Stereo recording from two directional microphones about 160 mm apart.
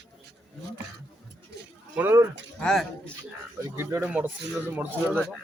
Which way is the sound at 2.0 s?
15° right (ahead or behind).